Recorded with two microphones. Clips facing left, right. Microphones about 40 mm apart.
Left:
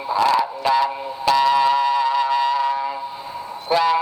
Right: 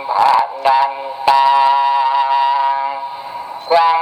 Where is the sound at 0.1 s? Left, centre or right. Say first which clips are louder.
Right 6 dB; centre.